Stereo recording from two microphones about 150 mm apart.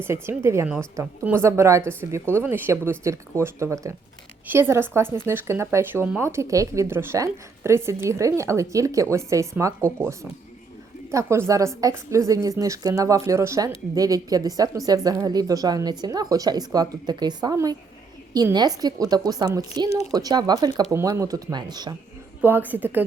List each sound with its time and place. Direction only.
0.0 s speech: 15° right (ahead or behind)
22.4 s speech: 10° right (ahead or behind)